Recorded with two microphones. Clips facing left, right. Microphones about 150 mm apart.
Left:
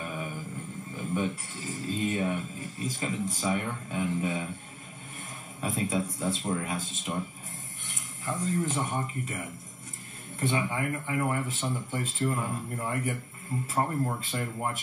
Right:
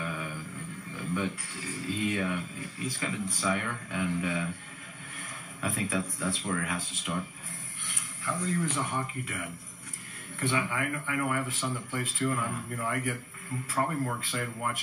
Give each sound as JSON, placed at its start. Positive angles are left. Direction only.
{"t": 0.9, "sound": "a sound", "side_deg": 40}
{"t": 2.2, "sound": "speech", "side_deg": 45}
{"t": 3.4, "sound": "speech", "side_deg": 20}
{"t": 3.9, "sound": "speech", "side_deg": 40}
{"t": 5.7, "sound": "speech", "side_deg": 20}
{"t": 8.3, "sound": "speech", "side_deg": 40}
{"t": 10.5, "sound": "speech", "side_deg": 30}